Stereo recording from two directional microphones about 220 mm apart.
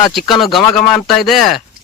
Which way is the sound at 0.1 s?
Centre (ahead or behind).